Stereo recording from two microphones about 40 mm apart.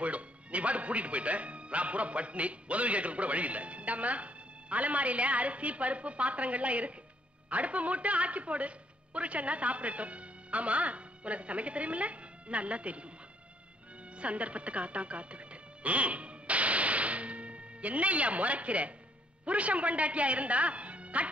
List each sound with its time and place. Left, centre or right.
0.0 s a man's voice: right
14.1 s music: right
19.4 s a man's voice: right